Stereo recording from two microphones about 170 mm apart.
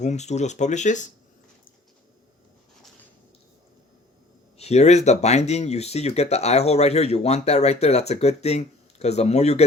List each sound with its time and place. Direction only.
0.0 s speech: 40° left (ahead or behind)
4.5 s speech: 40° left (ahead or behind)